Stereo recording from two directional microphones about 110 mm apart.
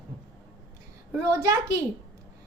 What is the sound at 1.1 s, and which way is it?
Speech, 25° right (ahead or behind).